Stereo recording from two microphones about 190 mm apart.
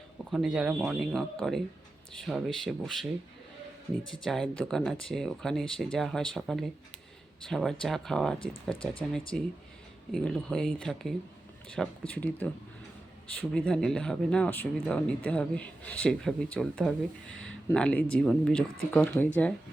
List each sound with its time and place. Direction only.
0.3 s speech: centre (ahead or behind)
4.1 s speech: centre (ahead or behind)